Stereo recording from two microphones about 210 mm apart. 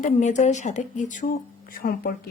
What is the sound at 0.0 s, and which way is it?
Speech, 35° left (ahead or behind).